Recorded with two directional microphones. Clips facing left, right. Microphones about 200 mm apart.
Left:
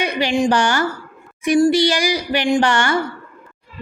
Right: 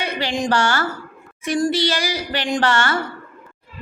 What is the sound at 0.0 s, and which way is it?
A woman's voice, 15° left (ahead or behind).